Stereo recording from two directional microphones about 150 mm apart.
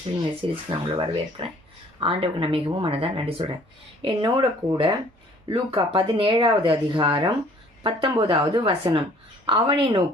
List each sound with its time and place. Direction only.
0.2 s speech: 35° right (ahead or behind)